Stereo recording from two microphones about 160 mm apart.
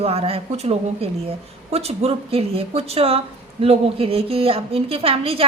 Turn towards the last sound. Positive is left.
turn(degrees=-35)  # may be behind; listen again after turning